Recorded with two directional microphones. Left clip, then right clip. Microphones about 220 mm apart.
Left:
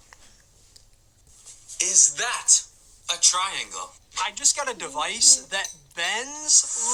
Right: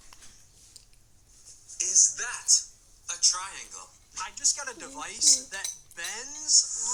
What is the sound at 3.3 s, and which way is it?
Speech, 50° left (ahead or behind).